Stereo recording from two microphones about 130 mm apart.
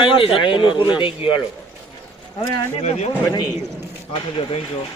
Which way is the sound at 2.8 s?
60° left (ahead or behind).